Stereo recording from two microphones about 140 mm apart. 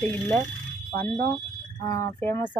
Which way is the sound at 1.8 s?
25° left (ahead or behind).